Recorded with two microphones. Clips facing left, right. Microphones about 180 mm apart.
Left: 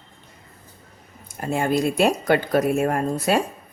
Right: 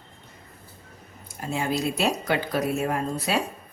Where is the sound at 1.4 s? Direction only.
55° left (ahead or behind).